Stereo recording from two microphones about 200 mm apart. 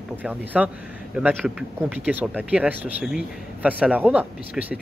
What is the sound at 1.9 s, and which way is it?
Speech, 10° right (ahead or behind).